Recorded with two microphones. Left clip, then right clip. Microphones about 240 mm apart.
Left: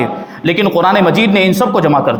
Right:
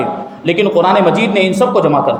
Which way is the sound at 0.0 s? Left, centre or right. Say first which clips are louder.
Left 1 dB; left.